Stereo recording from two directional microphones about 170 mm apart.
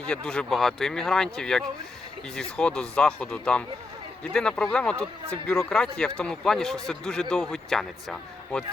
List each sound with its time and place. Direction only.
0.1 s a man's voice: 5° left (ahead or behind)